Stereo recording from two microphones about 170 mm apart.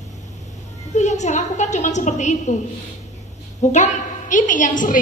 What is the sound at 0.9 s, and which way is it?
A woman's voice, 45° left (ahead or behind).